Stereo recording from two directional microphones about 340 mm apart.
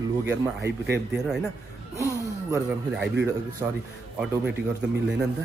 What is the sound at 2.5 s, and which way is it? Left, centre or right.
A man's voice, centre.